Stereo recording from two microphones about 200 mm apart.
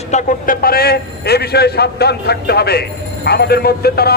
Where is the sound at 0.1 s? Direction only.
40° left (ahead or behind).